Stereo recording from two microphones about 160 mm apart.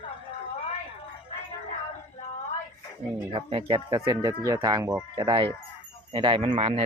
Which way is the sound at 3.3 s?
35° right (ahead or behind).